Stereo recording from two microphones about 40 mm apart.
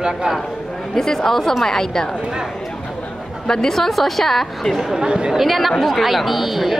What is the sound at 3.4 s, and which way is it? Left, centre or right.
A woman's voice, centre.